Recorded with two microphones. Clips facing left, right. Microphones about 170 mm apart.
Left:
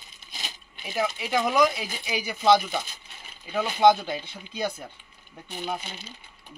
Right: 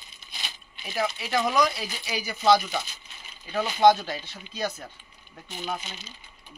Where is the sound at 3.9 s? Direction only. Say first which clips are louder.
Left 2 dB; 20° left (ahead or behind).